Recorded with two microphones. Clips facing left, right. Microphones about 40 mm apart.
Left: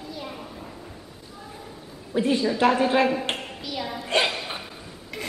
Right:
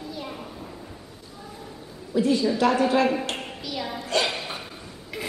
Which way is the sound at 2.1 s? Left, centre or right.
Left.